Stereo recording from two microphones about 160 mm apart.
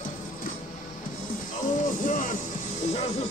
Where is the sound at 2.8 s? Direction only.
40° left (ahead or behind).